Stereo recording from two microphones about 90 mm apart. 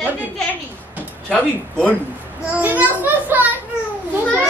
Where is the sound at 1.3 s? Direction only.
15° left (ahead or behind).